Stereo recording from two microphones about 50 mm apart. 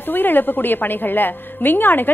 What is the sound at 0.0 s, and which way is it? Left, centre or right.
A woman's voice, left.